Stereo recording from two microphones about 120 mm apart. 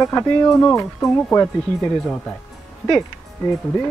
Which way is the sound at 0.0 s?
25° left (ahead or behind).